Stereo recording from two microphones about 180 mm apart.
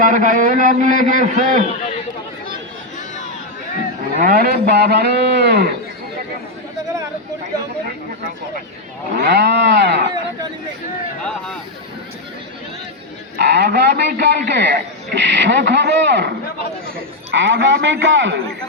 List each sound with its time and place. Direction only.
0.0 s a man's voice: 45° right (ahead or behind)
4.2 s speech: 55° right (ahead or behind)
9.1 s a man's voice: 70° right (ahead or behind)
13.3 s a man's voice: 70° right (ahead or behind)
17.3 s a man's voice: 90° right